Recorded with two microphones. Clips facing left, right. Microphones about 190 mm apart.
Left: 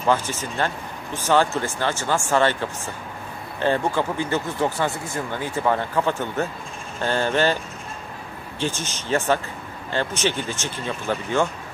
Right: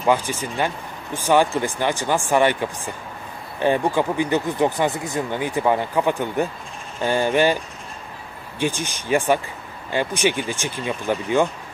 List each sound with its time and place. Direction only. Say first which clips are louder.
0.0 s speech: right 2 dB; 15° right (ahead or behind)
8.5 s speech: right 3 dB; 15° right (ahead or behind)